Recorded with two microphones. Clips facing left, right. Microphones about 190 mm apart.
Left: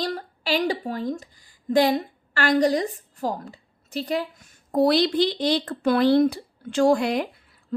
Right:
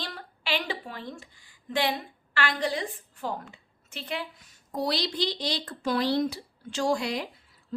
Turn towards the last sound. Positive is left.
turn(degrees=55)  # may be behind; listen again after turning